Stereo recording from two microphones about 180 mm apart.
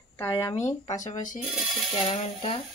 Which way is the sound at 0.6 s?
40° left (ahead or behind).